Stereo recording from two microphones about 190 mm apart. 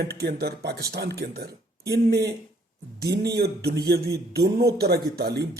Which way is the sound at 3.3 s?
60° right (ahead or behind).